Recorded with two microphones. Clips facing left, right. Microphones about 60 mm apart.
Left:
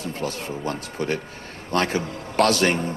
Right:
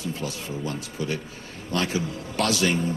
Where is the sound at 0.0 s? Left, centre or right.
Left.